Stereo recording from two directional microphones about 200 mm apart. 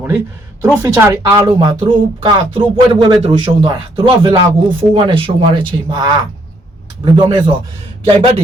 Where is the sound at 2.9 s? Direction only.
25° right (ahead or behind).